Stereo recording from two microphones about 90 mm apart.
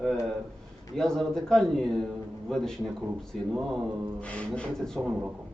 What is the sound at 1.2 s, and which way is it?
A man's voice, 5° left (ahead or behind).